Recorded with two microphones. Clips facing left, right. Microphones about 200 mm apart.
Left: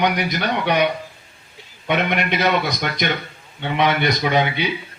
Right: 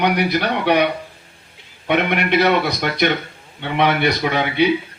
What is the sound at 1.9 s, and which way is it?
A man's voice, 60° right (ahead or behind).